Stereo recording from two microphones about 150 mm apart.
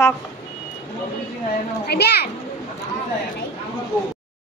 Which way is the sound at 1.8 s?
90° left.